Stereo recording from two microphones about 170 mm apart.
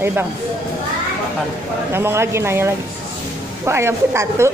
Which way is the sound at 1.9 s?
15° right (ahead or behind).